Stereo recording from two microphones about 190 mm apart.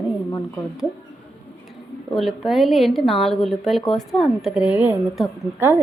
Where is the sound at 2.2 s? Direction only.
Centre (ahead or behind).